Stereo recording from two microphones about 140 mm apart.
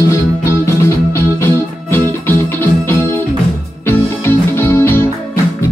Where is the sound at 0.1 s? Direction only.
20° left (ahead or behind).